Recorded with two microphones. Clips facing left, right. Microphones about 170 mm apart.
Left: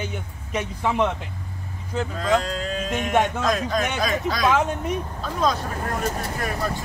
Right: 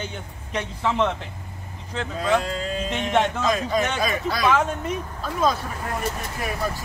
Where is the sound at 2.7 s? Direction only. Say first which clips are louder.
Left 1 dB; 5° left (ahead or behind).